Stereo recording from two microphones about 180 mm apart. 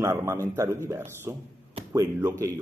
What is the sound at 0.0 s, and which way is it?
A man's voice, 15° right (ahead or behind).